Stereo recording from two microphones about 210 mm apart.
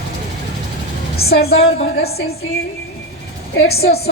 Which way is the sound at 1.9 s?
50° left (ahead or behind).